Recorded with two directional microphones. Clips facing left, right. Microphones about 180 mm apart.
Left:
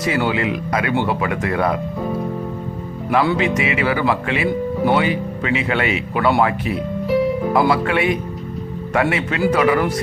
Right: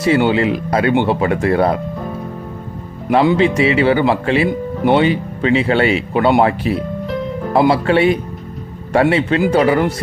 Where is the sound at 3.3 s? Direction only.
30° right (ahead or behind).